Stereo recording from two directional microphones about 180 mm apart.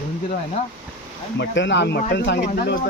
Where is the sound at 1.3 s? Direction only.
75° left (ahead or behind).